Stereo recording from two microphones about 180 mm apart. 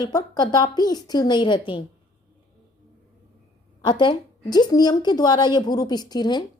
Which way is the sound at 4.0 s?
25° left (ahead or behind).